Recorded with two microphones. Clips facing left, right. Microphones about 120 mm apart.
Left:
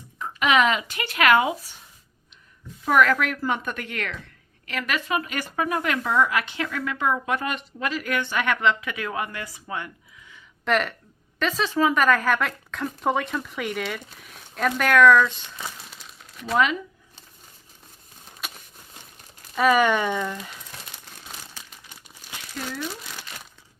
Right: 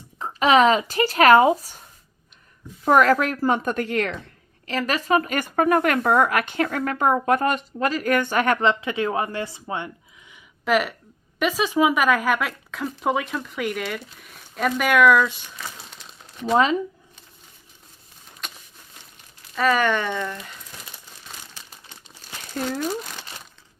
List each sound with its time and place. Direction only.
0.2 s speech: 30° right (ahead or behind)
2.8 s speech: 40° right (ahead or behind)
8.8 s speech: 30° right (ahead or behind)
10.7 s speech: 5° right (ahead or behind)
15.6 s a sound: 5° left (ahead or behind)
16.2 s a sound: 30° right (ahead or behind)
18.4 s a sound: 5° left (ahead or behind)
19.5 s speech: 10° left (ahead or behind)
22.7 s speech: 40° right (ahead or behind)